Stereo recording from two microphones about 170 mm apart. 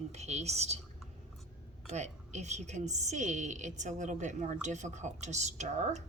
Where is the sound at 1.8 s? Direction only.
40° right (ahead or behind).